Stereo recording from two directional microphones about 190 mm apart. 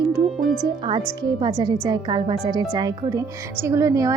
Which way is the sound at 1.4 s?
20° right (ahead or behind).